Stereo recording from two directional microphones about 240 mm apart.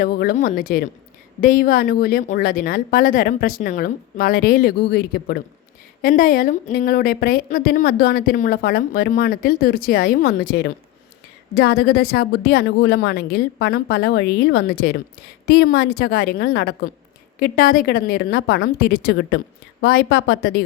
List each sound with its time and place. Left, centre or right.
0.0 s a woman's voice: left